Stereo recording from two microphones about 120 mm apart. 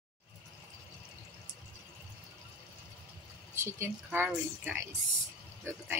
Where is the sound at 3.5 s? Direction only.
20° right (ahead or behind).